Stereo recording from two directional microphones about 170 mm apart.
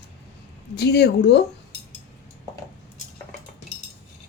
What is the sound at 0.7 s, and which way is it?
Speech, 75° left (ahead or behind).